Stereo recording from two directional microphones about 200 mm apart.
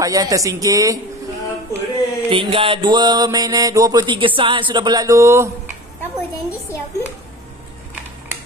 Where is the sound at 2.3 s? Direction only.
25° right (ahead or behind).